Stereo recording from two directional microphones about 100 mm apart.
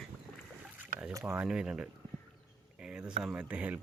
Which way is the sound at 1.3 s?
10° right (ahead or behind).